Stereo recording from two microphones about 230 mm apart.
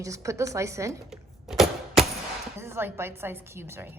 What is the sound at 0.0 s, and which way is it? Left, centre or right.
Speech, centre.